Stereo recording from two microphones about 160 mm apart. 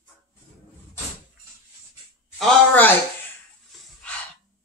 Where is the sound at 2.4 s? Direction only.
5° left (ahead or behind).